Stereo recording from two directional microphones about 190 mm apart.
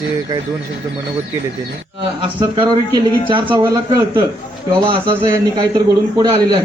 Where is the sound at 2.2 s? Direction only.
25° right (ahead or behind).